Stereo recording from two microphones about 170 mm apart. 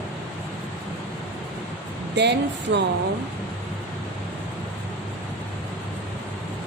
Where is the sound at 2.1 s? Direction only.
90° right.